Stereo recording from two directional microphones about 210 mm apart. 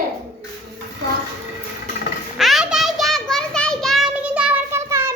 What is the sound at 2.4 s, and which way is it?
Child singing, centre (ahead or behind).